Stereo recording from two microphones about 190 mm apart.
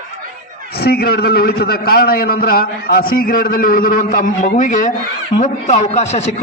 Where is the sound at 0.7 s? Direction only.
55° left (ahead or behind).